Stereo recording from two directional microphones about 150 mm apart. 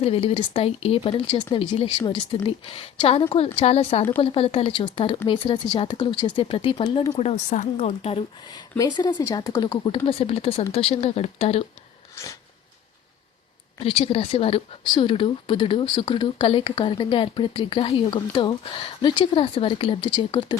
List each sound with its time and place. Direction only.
0.0 s speech: 40° left (ahead or behind)
7.1 s a woman's voice: 45° left (ahead or behind)
8.8 s speech: 30° left (ahead or behind)
12.1 s a sound: 20° left (ahead or behind)
13.7 s speech: 40° left (ahead or behind)